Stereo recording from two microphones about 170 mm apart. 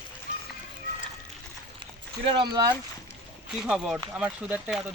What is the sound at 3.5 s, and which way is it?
Speech, 5° right (ahead or behind).